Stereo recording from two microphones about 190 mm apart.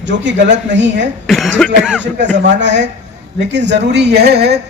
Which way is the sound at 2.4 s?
70° right (ahead or behind).